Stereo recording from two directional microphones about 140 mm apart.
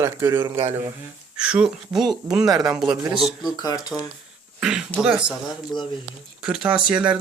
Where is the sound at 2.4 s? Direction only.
25° right (ahead or behind).